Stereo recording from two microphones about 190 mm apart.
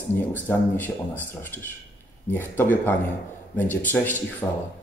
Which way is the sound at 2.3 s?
10° left (ahead or behind).